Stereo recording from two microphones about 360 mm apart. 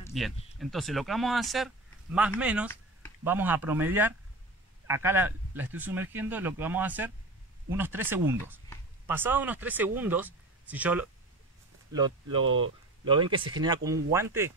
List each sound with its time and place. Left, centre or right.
0.0 s speech: centre